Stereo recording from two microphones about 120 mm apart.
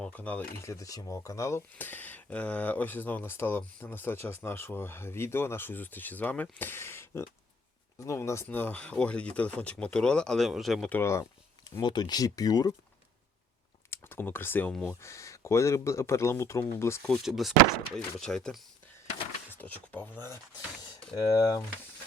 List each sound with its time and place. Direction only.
0.0 s speech: 15° left (ahead or behind)
10.8 s speech: 20° left (ahead or behind)
11.8 s speech: 35° left (ahead or behind)
13.9 s speech: 20° left (ahead or behind)
17.0 s speech: 5° left (ahead or behind)
21.2 s speech: 30° left (ahead or behind)